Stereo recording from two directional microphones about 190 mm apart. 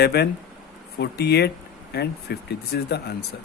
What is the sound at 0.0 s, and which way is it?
Speech, 55° left (ahead or behind).